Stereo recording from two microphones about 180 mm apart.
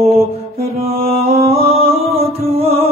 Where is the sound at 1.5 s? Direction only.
35° right (ahead or behind).